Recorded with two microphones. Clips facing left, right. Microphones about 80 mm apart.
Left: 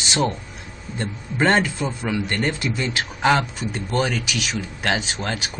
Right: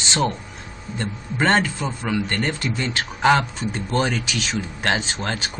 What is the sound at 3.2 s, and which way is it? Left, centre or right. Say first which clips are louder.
Speech: right 2 dB; centre.